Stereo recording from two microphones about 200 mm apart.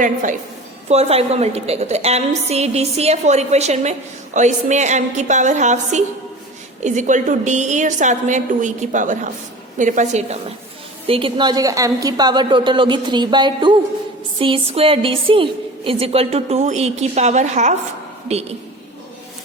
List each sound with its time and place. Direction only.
0.0 s a woman's voice: 40° right (ahead or behind)